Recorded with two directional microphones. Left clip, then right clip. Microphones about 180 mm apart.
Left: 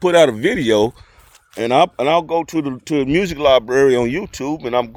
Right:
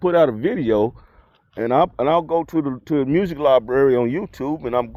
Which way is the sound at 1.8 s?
10° left (ahead or behind).